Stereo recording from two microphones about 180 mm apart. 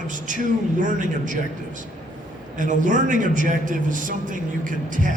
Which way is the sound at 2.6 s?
45° right (ahead or behind).